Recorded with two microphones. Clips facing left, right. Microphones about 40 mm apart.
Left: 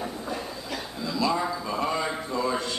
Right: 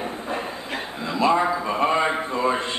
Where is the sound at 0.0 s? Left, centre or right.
Right.